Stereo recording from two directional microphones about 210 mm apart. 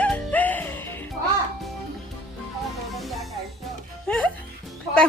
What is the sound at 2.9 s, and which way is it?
Music, centre (ahead or behind).